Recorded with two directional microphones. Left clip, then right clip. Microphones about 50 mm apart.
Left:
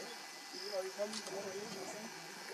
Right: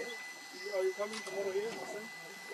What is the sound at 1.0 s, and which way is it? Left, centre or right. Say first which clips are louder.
Speech: right 2 dB; right.